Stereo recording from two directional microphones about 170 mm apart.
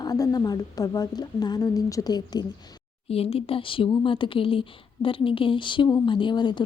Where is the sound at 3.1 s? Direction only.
35° left (ahead or behind).